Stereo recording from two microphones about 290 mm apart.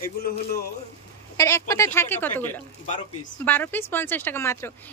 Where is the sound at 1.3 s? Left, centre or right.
Centre.